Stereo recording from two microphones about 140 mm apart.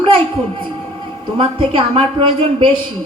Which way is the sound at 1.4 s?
40° right (ahead or behind).